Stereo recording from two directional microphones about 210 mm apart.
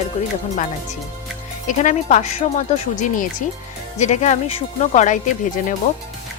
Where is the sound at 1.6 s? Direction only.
35° left (ahead or behind).